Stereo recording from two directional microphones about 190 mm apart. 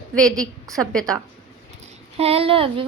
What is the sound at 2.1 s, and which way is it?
Speech, 30° right (ahead or behind).